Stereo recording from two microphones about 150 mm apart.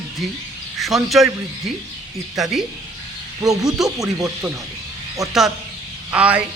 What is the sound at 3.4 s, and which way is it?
Speech, 25° right (ahead or behind).